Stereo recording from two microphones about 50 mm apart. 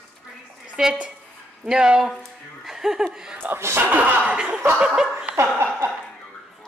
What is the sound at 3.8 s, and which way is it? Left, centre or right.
Speech, right.